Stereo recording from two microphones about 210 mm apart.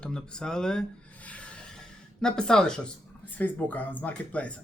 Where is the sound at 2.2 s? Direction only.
5° left (ahead or behind).